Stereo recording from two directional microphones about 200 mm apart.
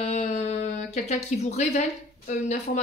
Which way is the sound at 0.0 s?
35° left (ahead or behind).